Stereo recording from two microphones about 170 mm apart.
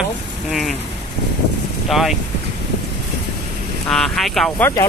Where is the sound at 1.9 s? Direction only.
Centre (ahead or behind).